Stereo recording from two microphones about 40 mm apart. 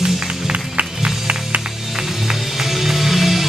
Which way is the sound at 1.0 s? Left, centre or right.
Right.